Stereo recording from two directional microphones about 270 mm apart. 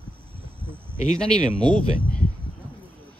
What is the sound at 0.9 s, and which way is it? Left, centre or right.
Speech, left.